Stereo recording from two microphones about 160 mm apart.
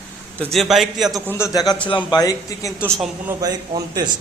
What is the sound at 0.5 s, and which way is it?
Speech, centre (ahead or behind).